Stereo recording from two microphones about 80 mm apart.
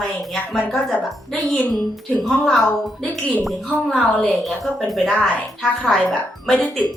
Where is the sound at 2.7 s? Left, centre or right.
Centre.